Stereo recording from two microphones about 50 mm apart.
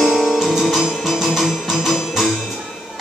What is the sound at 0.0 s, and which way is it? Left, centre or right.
Music, centre.